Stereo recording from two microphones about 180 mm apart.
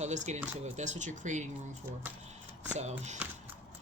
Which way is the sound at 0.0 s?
40° right (ahead or behind).